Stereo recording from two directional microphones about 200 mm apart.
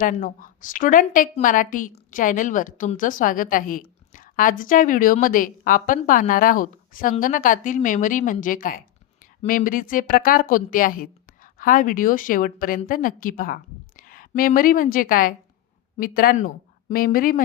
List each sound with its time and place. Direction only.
0.0 s a woman's voice: 45° left (ahead or behind)